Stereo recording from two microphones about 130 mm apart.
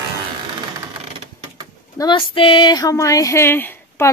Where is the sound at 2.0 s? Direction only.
40° left (ahead or behind); by 4.0 s 15° left (ahead or behind).